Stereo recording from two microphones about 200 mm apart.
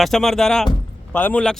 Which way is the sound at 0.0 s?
Centre (ahead or behind).